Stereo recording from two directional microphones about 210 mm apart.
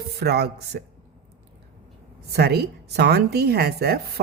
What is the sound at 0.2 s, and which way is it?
Speech, 50° right (ahead or behind).